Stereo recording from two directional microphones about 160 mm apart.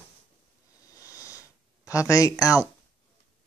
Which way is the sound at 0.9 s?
20° left (ahead or behind).